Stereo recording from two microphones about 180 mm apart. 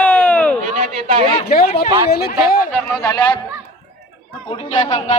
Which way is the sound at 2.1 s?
60° left (ahead or behind).